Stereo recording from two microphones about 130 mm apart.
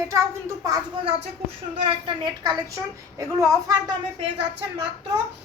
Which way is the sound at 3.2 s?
25° right (ahead or behind).